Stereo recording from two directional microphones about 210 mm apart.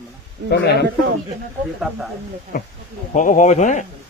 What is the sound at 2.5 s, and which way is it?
Speech, 45° left (ahead or behind).